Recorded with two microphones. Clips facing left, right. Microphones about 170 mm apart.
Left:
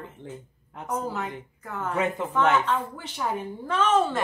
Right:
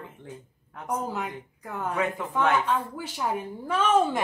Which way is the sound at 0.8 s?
15° right (ahead or behind).